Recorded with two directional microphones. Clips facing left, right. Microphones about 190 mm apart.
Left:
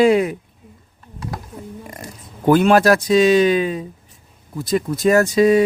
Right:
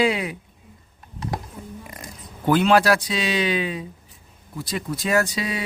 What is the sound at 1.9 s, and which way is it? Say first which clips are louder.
Speech: left 4 dB; 45° left (ahead or behind).